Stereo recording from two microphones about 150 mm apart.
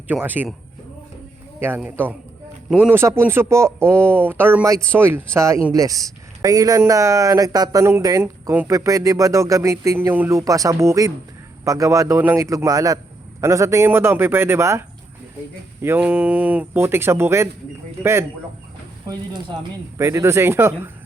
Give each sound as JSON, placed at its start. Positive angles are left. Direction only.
{"t": 0.1, "sound": "speech", "side_deg": -10}
{"t": 1.5, "sound": "speech", "side_deg": -15}
{"t": 19.0, "sound": "speech", "side_deg": -30}
{"t": 20.0, "sound": "speech", "side_deg": -20}